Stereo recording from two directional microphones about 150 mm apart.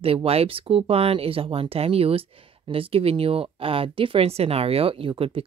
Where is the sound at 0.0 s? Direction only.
40° right (ahead or behind).